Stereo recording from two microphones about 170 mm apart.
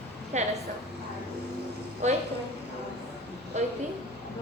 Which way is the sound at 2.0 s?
45° right (ahead or behind).